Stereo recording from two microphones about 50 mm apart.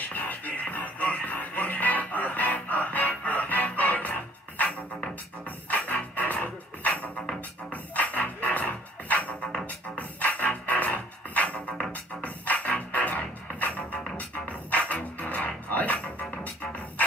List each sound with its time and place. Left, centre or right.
0.1 s music: left
5.7 s music: left